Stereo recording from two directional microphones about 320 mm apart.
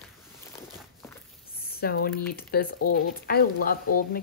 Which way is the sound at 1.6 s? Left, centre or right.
Left.